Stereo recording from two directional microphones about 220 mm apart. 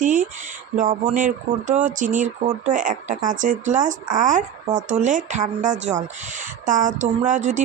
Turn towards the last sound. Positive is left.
turn(degrees=-35)  # may be behind; listen again after turning